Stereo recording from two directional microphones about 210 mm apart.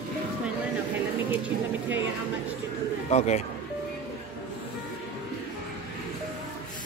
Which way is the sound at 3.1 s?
35° left (ahead or behind).